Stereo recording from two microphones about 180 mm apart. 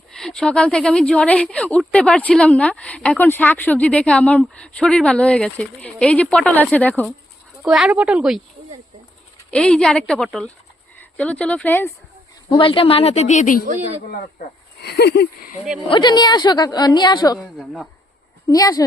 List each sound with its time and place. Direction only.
0.1 s a woman's voice: 5° left (ahead or behind)
7.6 s a woman's voice: 5° right (ahead or behind)
9.5 s a woman's voice: 5° left (ahead or behind)
12.5 s speech: 30° left (ahead or behind); by 13.7 s 45° left (ahead or behind)
13.7 s a woman's voice: 40° right (ahead or behind)
14.1 s speech: 55° left (ahead or behind)
15.9 s a woman's voice: 25° left (ahead or behind)
18.4 s a woman's voice: 20° left (ahead or behind)